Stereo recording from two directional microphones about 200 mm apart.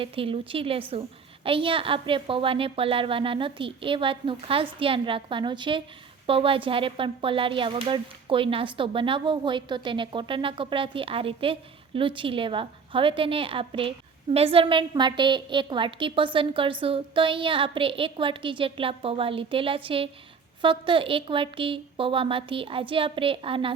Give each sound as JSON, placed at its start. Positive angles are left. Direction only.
{"t": 0.0, "sound": "a woman's voice", "side_deg": -25}